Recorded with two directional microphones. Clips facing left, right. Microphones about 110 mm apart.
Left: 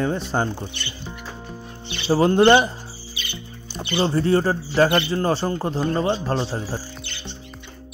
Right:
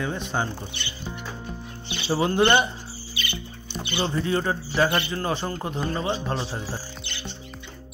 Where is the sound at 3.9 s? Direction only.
35° left (ahead or behind).